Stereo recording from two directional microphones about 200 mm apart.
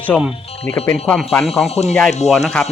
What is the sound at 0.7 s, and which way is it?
Speech, 10° left (ahead or behind).